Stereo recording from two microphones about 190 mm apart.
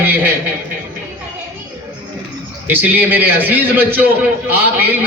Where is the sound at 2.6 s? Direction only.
10° right (ahead or behind).